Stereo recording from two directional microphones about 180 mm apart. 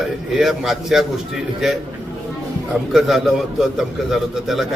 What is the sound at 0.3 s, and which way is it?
Speech, centre (ahead or behind).